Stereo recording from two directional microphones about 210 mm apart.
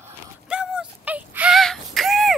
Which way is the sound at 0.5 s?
5° right (ahead or behind).